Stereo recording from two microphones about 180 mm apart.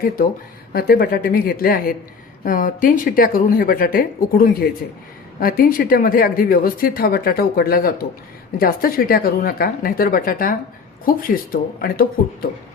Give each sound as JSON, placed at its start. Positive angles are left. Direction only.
{"t": 0.7, "sound": "speech", "side_deg": 55}